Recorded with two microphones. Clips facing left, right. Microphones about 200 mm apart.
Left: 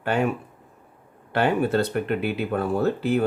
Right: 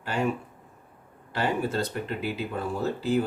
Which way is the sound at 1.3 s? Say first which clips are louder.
Left 6 dB; 60° left (ahead or behind).